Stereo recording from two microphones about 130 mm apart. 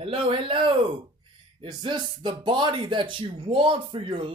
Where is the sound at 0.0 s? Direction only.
45° right (ahead or behind).